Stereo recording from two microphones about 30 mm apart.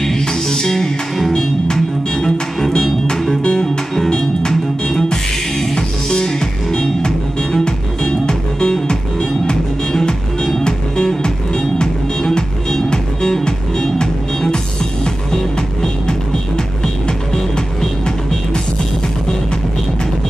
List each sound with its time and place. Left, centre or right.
0.2 s music: left
3.5 s music: centre
11.2 s music: left